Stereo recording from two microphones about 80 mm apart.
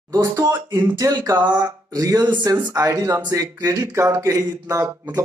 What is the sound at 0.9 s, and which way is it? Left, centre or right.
Speech, right.